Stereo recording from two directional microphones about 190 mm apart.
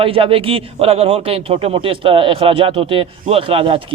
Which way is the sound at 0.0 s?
30° right (ahead or behind).